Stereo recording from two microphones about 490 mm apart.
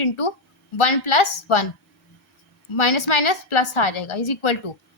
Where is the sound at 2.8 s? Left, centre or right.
Left.